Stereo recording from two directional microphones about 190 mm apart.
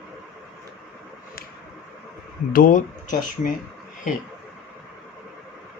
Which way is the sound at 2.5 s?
45° left (ahead or behind).